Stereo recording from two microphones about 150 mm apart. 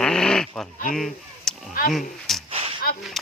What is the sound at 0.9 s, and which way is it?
Honk, centre (ahead or behind).